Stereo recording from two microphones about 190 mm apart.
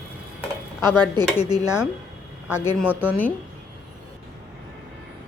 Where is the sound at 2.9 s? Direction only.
10° right (ahead or behind).